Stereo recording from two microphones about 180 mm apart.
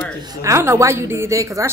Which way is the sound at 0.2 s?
20° right (ahead or behind).